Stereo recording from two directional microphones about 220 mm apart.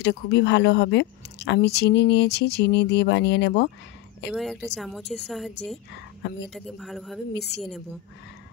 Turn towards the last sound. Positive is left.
turn(degrees=0)  # may be behind; listen again after turning